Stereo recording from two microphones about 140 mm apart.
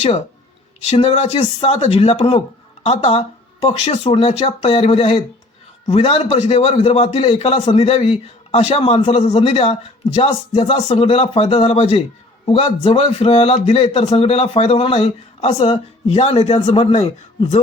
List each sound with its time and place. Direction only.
0.9 s speech: 50° left (ahead or behind)